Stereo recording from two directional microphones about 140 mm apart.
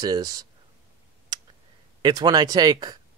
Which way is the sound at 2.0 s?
30° right (ahead or behind).